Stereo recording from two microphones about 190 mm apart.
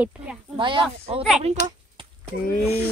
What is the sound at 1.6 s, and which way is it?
Speech, 55° left (ahead or behind).